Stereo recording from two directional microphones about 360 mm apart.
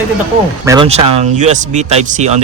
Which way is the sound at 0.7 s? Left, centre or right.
Centre.